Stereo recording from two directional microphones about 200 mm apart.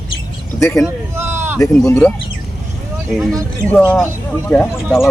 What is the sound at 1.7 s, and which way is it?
Speech, 5° left (ahead or behind).